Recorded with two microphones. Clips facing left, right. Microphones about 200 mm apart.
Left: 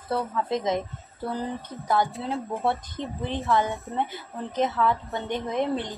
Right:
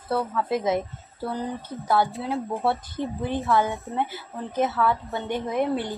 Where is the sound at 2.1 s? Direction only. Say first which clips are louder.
Right 2 dB; centre (ahead or behind).